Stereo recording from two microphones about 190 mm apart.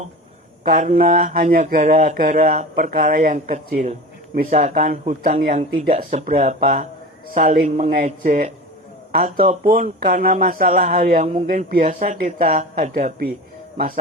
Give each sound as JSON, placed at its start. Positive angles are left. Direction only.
{"t": 0.6, "sound": "speech", "side_deg": -45}
{"t": 9.6, "sound": "speech", "side_deg": -45}